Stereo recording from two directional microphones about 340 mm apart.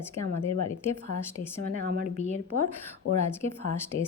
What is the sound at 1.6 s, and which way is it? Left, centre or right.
Speech, right.